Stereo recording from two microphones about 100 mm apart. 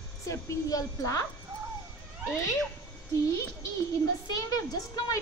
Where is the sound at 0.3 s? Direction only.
35° left (ahead or behind).